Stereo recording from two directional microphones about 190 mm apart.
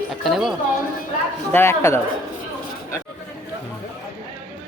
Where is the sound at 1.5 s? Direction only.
15° left (ahead or behind).